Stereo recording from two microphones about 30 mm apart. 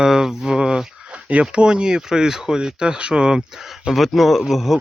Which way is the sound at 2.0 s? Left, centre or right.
Centre.